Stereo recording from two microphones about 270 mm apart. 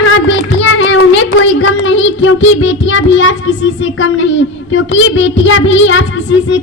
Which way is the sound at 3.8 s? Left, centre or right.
Left.